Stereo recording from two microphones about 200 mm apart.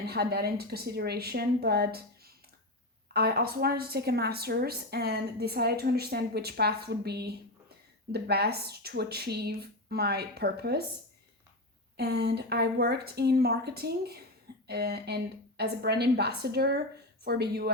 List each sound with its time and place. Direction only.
0.0 s a woman's voice: 50° right (ahead or behind)
11.9 s a woman's voice: 55° right (ahead or behind)